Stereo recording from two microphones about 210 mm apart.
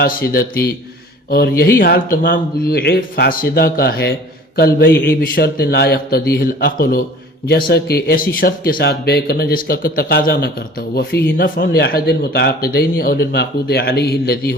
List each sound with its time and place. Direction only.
0.0 s speech: 45° left (ahead or behind)